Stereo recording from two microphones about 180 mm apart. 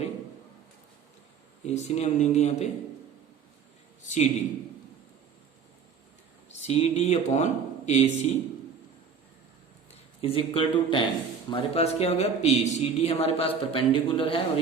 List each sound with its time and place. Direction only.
1.6 s speech: 40° left (ahead or behind)
4.0 s a man's voice: 40° left (ahead or behind)
6.5 s speech: 35° left (ahead or behind)
10.2 s speech: 30° left (ahead or behind)